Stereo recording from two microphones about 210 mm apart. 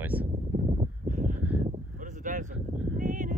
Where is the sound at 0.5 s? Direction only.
35° right (ahead or behind).